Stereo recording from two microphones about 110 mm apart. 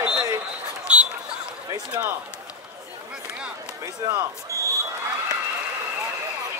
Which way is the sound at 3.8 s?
20° right (ahead or behind).